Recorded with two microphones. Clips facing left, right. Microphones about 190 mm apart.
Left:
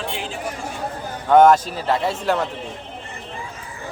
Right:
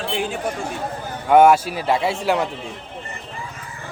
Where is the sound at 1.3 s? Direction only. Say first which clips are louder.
Even; 10° right (ahead or behind).